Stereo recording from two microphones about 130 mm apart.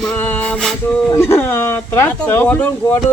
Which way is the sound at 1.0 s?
20° left (ahead or behind).